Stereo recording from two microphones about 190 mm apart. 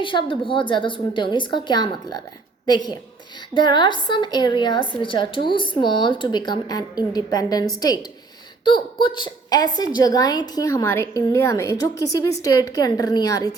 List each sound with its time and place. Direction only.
0.0 s a woman's voice: 25° left (ahead or behind)